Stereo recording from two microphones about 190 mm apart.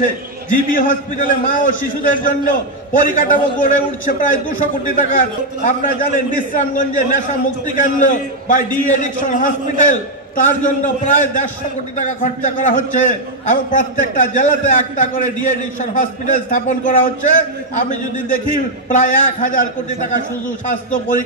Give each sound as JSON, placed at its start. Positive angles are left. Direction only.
{"t": 0.0, "sound": "a man's voice", "side_deg": 45}
{"t": 18.9, "sound": "a man's voice", "side_deg": 40}